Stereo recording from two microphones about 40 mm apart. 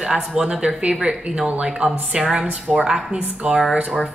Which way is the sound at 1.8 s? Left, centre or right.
Centre.